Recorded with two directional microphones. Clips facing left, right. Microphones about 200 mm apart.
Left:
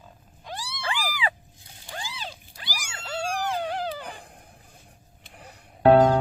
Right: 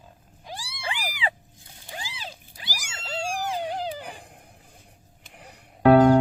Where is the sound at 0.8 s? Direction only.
25° right (ahead or behind).